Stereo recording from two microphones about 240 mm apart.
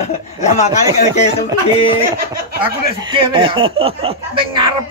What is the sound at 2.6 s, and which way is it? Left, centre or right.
Speech, right.